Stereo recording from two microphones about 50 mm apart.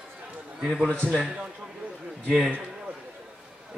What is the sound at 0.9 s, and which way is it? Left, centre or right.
Speech, centre.